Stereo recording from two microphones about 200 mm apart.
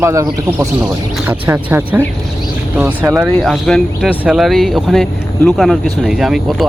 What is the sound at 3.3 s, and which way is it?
Speech, centre (ahead or behind).